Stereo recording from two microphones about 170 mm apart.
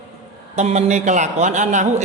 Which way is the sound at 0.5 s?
40° right (ahead or behind).